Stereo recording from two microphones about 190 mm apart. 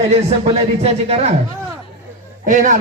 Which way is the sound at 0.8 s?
30° right (ahead or behind).